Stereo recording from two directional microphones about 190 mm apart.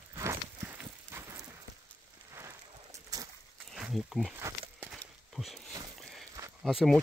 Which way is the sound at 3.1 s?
20° right (ahead or behind).